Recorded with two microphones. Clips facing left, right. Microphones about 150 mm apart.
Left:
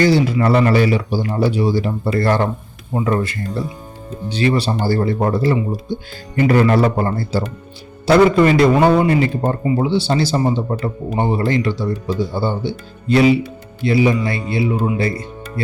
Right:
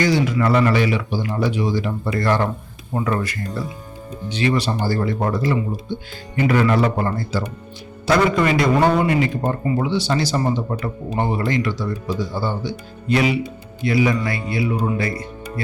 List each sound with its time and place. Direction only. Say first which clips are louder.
0.0 s speech: left 4 dB; 30° left (ahead or behind)
2.9 s speech: left 3 dB; 20° left (ahead or behind)